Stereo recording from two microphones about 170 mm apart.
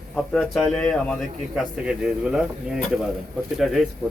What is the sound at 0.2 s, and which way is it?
Speech, centre (ahead or behind).